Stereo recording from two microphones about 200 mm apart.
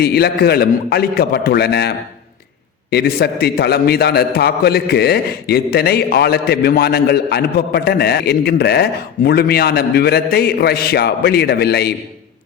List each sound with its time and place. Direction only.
0.0 s a man's voice: 50° left (ahead or behind)
2.9 s a man's voice: 50° left (ahead or behind)